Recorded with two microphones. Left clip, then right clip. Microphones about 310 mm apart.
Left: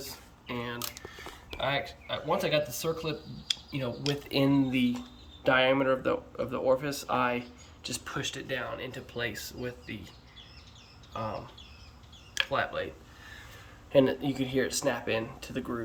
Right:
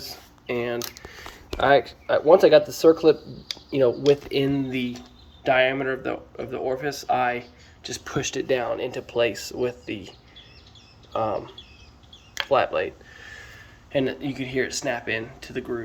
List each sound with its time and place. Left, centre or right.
0.4 s squish: centre
1.6 s speech: centre
4.4 s speech: centre
7.9 s speech: centre
11.1 s speech: centre
13.9 s speech: centre